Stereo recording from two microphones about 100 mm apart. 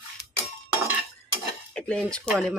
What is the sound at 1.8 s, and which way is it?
Speech, 10° left (ahead or behind).